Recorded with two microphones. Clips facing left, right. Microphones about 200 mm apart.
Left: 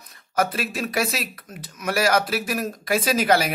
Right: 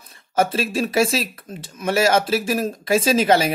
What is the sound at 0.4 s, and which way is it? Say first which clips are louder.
Speech: right 4 dB; 30° right (ahead or behind).